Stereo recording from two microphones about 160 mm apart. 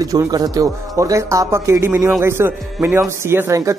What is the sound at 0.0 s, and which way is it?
A man's voice, 20° right (ahead or behind).